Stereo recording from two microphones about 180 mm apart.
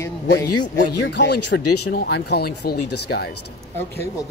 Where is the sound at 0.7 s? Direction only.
75° left (ahead or behind).